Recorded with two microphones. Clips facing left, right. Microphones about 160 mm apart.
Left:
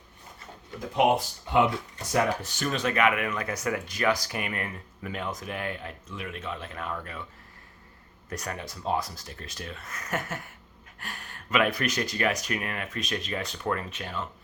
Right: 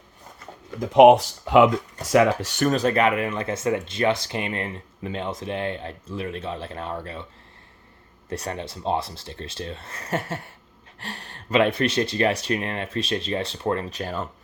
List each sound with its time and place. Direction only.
0.8 s speech: 85° right
2.6 s speech: 35° right (ahead or behind)
8.3 s speech: 30° right (ahead or behind)